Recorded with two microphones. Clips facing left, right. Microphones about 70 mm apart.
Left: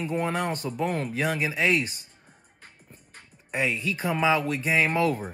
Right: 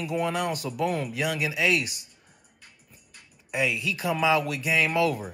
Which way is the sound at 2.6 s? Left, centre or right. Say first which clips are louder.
Left 5 dB; left.